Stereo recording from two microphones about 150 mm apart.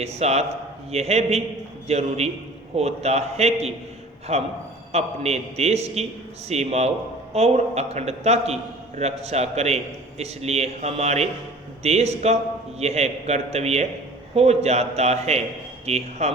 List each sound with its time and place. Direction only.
0.0 s a man's voice: 45° right (ahead or behind)